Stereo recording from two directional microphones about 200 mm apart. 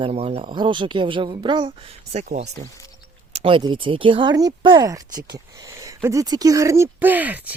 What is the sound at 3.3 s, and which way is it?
Speech, 30° right (ahead or behind).